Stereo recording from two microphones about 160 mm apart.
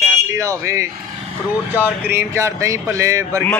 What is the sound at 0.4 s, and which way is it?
Speech, 20° right (ahead or behind).